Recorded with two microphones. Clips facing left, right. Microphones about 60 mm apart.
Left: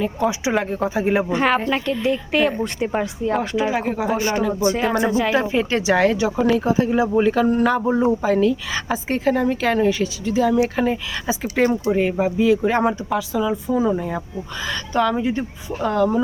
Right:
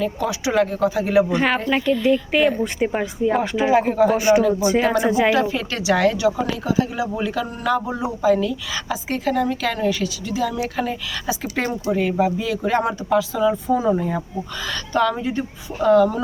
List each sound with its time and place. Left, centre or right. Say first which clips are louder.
0.0 s speech: left 2 dB; left
1.4 s speech: left 1 dB; centre
3.9 s speech: right 5 dB; centre
4.2 s speech: right 4 dB; centre
5.3 s speech: left 1 dB; left
12.9 s speech: right 2 dB; centre